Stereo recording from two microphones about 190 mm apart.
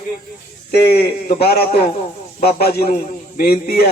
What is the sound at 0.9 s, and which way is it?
A man's voice, 55° left (ahead or behind).